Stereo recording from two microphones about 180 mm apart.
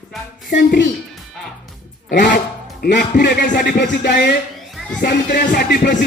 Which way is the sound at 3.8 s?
75° left (ahead or behind).